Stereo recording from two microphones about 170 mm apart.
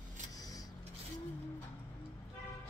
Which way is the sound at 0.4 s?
20° left (ahead or behind).